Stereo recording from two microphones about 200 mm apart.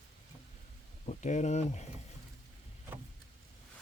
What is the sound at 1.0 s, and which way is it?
Speech, 35° left (ahead or behind).